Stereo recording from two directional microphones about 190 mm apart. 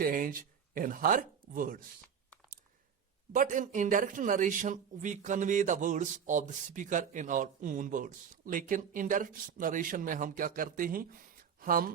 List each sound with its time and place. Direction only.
0.0 s speech: 45° right (ahead or behind)
3.3 s a man's voice: 45° right (ahead or behind)